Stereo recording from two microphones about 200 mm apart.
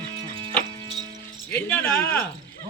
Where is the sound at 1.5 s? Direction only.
10° left (ahead or behind).